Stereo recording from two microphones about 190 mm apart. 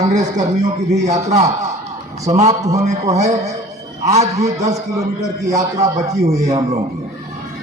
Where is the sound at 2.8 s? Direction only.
35° right (ahead or behind).